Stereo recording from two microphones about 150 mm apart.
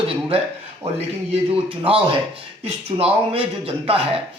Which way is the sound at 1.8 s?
40° right (ahead or behind).